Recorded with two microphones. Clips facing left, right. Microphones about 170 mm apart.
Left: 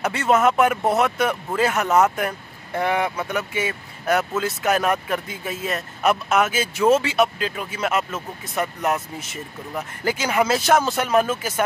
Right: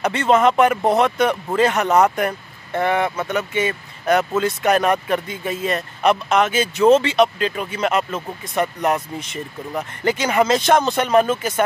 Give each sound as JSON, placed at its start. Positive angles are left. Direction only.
{"t": 0.0, "sound": "speech", "side_deg": 5}